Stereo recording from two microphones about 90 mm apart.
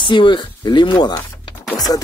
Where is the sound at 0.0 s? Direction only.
60° left (ahead or behind).